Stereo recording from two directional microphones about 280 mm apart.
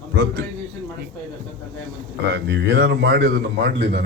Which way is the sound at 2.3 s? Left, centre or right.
Right.